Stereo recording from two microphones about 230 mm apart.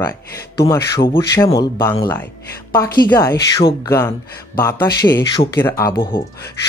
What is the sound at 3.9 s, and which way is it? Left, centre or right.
Speech, centre.